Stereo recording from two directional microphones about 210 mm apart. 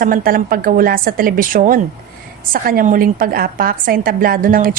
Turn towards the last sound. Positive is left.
turn(degrees=-40)  # may be behind; listen again after turning